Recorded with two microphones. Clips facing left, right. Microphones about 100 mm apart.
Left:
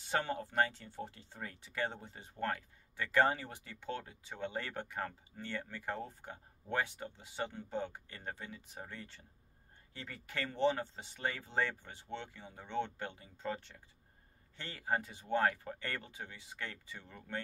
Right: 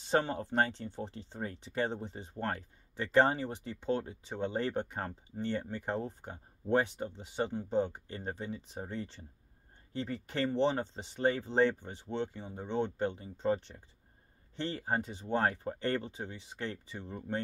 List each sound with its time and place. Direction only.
0.0 s speech: 25° right (ahead or behind)